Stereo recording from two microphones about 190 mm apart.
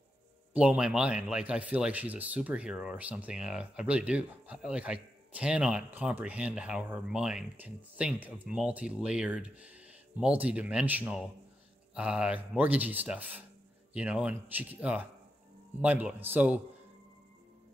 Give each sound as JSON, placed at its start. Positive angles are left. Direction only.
{"t": 0.5, "sound": "speech", "side_deg": -5}